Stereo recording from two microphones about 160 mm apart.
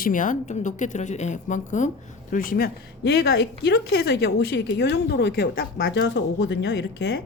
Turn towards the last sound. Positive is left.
turn(degrees=90)